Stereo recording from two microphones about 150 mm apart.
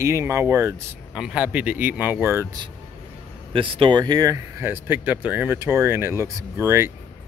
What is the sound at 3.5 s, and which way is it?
Speech, 35° right (ahead or behind).